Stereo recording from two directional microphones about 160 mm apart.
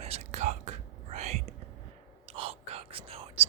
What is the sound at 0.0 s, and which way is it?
Whispering, 45° right (ahead or behind).